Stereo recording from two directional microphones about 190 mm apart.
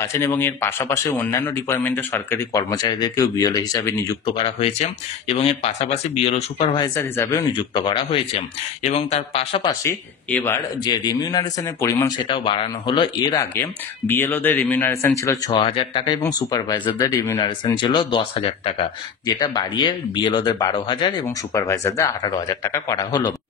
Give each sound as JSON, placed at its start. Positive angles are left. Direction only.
{"t": 0.0, "sound": "speech", "side_deg": 15}
{"t": 4.4, "sound": "speech", "side_deg": 30}
{"t": 6.8, "sound": "speech", "side_deg": 15}
{"t": 9.8, "sound": "speech", "side_deg": 10}
{"t": 12.2, "sound": "speech", "side_deg": 25}
{"t": 15.5, "sound": "speech", "side_deg": 25}